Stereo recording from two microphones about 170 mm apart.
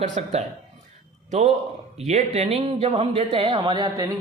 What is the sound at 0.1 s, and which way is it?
Speech, 35° right (ahead or behind).